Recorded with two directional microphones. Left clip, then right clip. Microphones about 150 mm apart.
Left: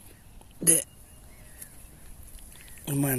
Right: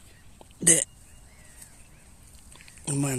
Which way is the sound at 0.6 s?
35° right (ahead or behind).